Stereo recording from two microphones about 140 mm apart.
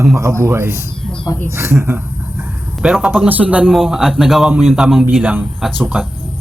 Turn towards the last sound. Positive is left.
turn(degrees=-10)  # may be behind; listen again after turning